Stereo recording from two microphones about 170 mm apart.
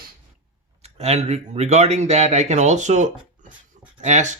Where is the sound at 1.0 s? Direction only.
40° right (ahead or behind).